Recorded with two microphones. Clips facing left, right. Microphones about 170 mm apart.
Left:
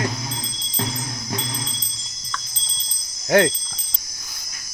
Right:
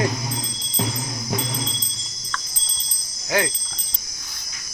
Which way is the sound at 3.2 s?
55° left (ahead or behind).